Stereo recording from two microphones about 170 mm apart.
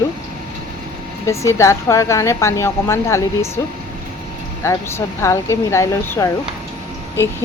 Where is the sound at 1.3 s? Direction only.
15° left (ahead or behind).